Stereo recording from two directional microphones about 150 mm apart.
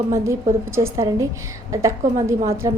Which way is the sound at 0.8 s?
20° right (ahead or behind).